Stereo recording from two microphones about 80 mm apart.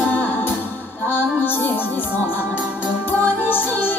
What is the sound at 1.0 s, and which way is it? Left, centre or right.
Music, left.